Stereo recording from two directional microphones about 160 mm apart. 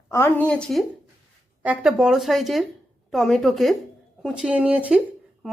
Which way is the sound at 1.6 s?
10° right (ahead or behind).